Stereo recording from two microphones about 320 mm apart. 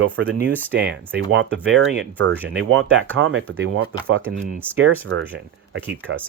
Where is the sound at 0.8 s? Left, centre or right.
Right.